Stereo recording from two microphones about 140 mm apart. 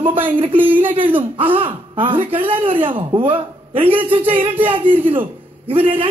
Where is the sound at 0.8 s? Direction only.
40° right (ahead or behind).